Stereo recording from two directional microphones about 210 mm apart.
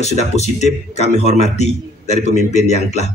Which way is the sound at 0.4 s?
30° left (ahead or behind).